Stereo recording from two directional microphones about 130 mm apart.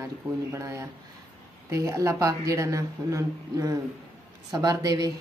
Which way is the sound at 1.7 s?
25° right (ahead or behind).